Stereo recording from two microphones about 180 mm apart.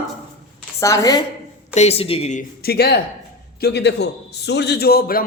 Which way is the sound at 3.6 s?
75° left (ahead or behind).